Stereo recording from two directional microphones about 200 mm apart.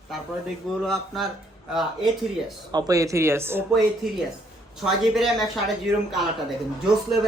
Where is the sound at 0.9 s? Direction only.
Centre (ahead or behind).